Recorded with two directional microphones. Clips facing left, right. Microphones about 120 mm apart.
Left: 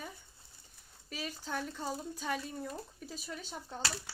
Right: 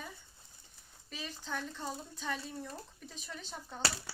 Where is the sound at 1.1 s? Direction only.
5° left (ahead or behind).